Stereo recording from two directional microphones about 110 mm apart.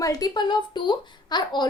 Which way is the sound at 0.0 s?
35° left (ahead or behind).